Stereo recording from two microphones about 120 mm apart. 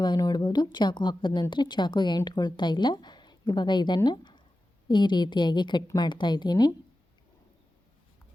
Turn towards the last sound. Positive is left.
turn(degrees=35)  # may be behind; listen again after turning